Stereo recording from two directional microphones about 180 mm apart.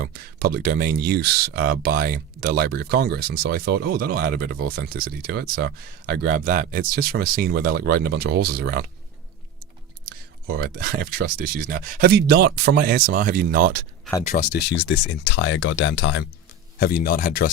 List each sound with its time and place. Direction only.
0.0 s speech: 55° right (ahead or behind)
10.5 s speech: 55° right (ahead or behind)
14.3 s speech: 50° left (ahead or behind)
14.8 s speech: 90° left
16.8 s speech: 55° left (ahead or behind)